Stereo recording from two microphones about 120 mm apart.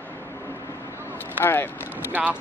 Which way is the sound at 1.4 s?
15° left (ahead or behind).